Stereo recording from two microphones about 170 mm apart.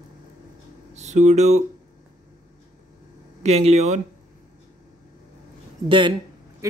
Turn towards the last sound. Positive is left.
turn(degrees=-20)  # may be behind; listen again after turning